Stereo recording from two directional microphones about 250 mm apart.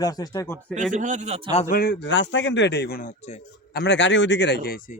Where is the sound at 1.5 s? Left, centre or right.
Left.